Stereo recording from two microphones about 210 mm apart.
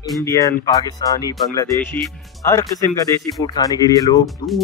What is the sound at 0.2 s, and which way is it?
Speech, 15° left (ahead or behind).